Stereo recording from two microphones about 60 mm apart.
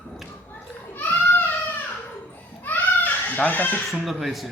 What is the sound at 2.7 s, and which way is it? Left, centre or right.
Children playing, left.